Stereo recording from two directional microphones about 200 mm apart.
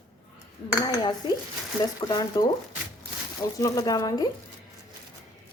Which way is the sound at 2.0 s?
20° left (ahead or behind).